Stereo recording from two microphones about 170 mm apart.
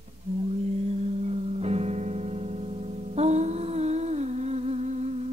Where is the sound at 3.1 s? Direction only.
40° right (ahead or behind).